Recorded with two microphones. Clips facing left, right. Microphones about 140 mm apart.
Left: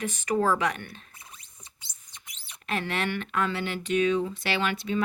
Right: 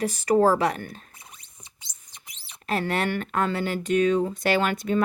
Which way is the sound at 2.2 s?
35° right (ahead or behind).